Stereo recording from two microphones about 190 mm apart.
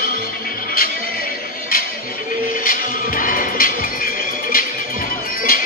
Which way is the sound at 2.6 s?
50° left (ahead or behind).